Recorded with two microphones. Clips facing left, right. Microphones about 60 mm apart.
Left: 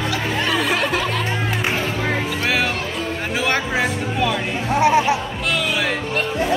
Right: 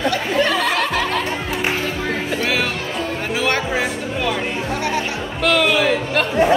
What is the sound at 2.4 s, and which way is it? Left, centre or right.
Speech, centre.